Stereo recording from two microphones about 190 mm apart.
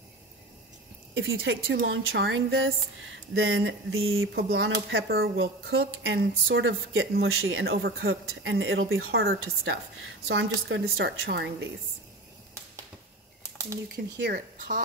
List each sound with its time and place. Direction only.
1.1 s speech: 90° right
1.9 s speech: 70° right (ahead or behind); by 4.5 s 90° right
4.6 s a woman's voice: 75° right (ahead or behind)
6.5 s a woman's voice: 90° right; by 11.7 s 70° right (ahead or behind)
14.2 s speech: 50° right (ahead or behind)